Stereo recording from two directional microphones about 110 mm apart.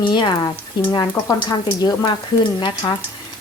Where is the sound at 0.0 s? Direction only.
45° left (ahead or behind).